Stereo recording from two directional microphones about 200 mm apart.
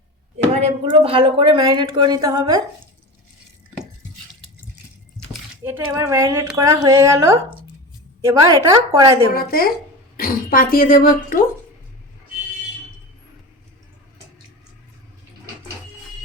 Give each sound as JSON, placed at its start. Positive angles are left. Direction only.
{"t": 0.5, "sound": "speech", "side_deg": -30}
{"t": 5.6, "sound": "a woman's voice", "side_deg": -15}
{"t": 9.3, "sound": "speech", "side_deg": 50}